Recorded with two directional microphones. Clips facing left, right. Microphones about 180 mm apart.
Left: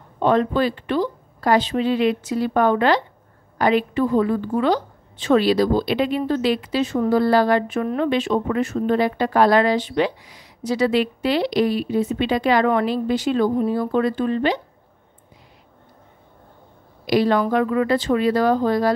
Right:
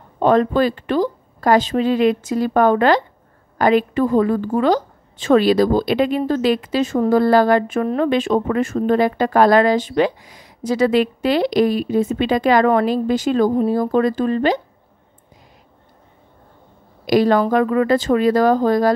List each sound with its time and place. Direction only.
0.2 s a woman's voice: 45° right (ahead or behind)
17.0 s a woman's voice: 45° right (ahead or behind)